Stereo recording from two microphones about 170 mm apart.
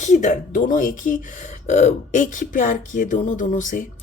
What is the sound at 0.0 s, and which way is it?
Speech, 45° left (ahead or behind).